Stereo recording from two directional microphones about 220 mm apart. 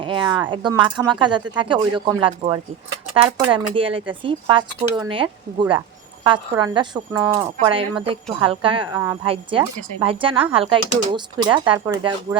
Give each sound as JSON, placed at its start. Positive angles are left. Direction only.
{"t": 0.0, "sound": "a woman's voice", "side_deg": -20}
{"t": 7.6, "sound": "a woman's voice", "side_deg": -25}